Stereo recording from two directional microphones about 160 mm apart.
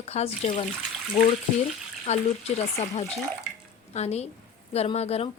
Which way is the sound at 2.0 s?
45° left (ahead or behind).